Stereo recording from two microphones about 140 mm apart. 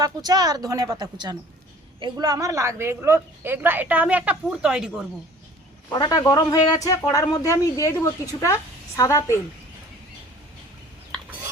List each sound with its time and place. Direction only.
0.0 s a woman's voice: 30° right (ahead or behind); by 5.0 s 5° right (ahead or behind)
5.9 s speech: 25° left (ahead or behind)